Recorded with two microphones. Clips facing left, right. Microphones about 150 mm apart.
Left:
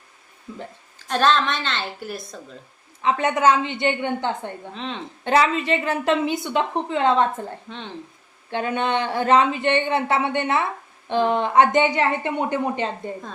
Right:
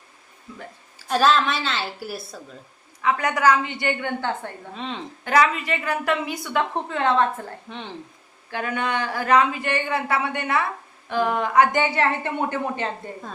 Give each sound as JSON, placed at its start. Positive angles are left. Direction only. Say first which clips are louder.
{"t": 0.9, "sound": "a woman's voice", "louder": "even", "side_deg": -5}
{"t": 3.0, "sound": "a woman's voice", "louder": "left 2 dB", "side_deg": 25}
{"t": 4.7, "sound": "a woman's voice", "louder": "right 2 dB", "side_deg": -5}
{"t": 5.2, "sound": "a woman's voice", "louder": "left 1 dB", "side_deg": 25}
{"t": 7.7, "sound": "speech", "louder": "even", "side_deg": -5}
{"t": 8.4, "sound": "a woman's voice", "louder": "left 3 dB", "side_deg": 25}